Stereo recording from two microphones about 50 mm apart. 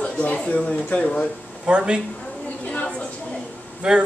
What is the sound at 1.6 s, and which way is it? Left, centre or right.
Speech, right.